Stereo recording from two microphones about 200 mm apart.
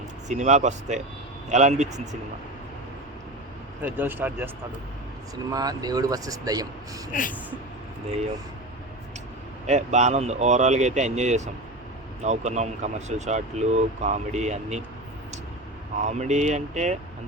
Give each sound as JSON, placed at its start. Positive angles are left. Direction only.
{"t": 0.3, "sound": "speech", "side_deg": -35}
{"t": 3.8, "sound": "speech", "side_deg": -10}
{"t": 5.5, "sound": "speech", "side_deg": -20}
{"t": 7.1, "sound": "speech", "side_deg": 40}
{"t": 9.6, "sound": "speech", "side_deg": -35}
{"t": 16.0, "sound": "speech", "side_deg": -35}